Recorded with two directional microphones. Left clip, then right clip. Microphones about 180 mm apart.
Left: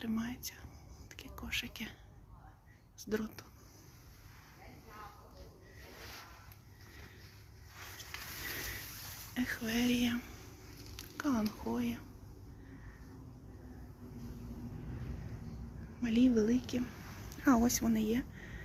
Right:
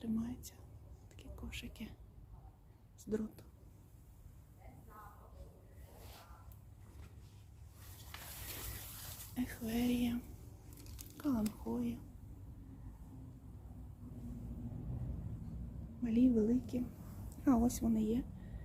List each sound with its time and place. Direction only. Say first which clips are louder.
0.0 s speech: left 3 dB; centre (ahead or behind)
3.0 s speech: left 3 dB; 5° right (ahead or behind)
9.3 s speech: left 5 dB; centre (ahead or behind)
11.2 s speech: left 3 dB; 10° left (ahead or behind)
16.0 s speech: left 3 dB; centre (ahead or behind)